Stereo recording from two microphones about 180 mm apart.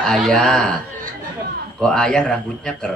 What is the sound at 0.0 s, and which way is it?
Speech, 5° left (ahead or behind).